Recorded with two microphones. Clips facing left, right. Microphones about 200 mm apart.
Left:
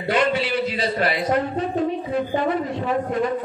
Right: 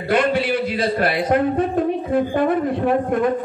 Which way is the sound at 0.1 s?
55° right (ahead or behind).